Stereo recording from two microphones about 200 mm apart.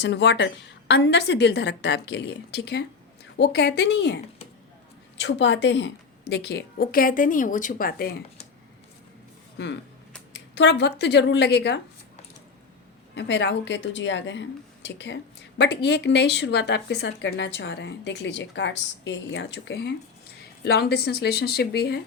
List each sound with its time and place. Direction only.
0.0 s a woman's voice: 60° left (ahead or behind)
10.3 s speech: 65° left (ahead or behind)
13.1 s a woman's voice: 60° left (ahead or behind)